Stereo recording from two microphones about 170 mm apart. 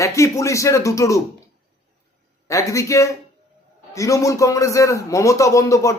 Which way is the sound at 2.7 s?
20° left (ahead or behind).